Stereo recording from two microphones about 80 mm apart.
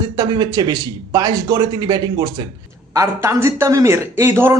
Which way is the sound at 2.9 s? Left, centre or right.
Right.